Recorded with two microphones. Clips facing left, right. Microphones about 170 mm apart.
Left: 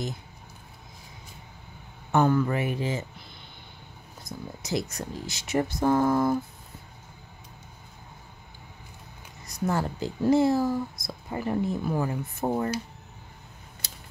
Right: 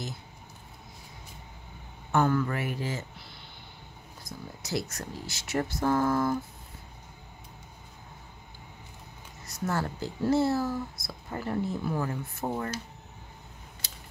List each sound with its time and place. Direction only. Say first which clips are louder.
2.1 s speech: left 3 dB; 20° left (ahead or behind)
4.2 s speech: left 4 dB; 20° left (ahead or behind)
9.7 s speech: left 3 dB; 15° left (ahead or behind)